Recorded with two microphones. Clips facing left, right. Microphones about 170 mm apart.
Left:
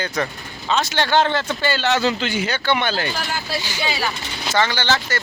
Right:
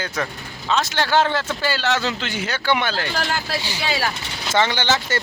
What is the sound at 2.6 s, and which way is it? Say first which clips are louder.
Speech: right 1 dB; 10° right (ahead or behind).